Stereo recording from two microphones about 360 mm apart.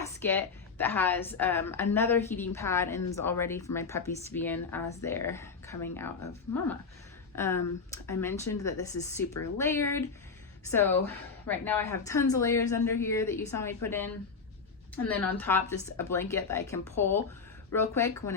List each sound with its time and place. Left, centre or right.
0.0 s a sound: centre
0.8 s a woman's voice: centre
7.3 s a woman's voice: centre